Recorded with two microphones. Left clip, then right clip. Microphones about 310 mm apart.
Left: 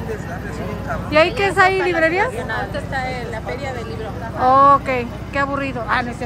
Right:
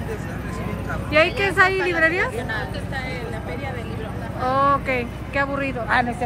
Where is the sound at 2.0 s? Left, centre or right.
Centre.